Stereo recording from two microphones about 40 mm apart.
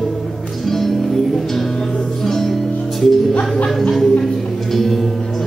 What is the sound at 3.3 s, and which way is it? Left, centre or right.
Music, left.